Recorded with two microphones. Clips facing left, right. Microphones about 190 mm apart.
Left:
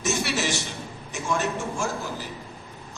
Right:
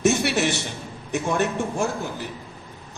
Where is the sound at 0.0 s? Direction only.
60° right (ahead or behind).